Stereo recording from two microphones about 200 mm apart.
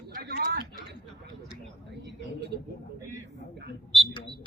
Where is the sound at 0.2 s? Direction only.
50° right (ahead or behind).